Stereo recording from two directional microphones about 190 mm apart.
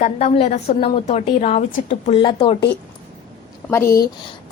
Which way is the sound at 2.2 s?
25° left (ahead or behind).